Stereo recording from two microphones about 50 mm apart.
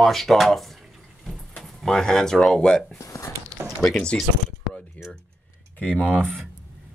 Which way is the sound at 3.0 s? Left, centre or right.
Left.